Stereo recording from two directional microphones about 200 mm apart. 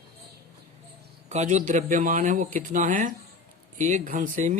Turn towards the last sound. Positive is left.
turn(degrees=-40)  # may be behind; listen again after turning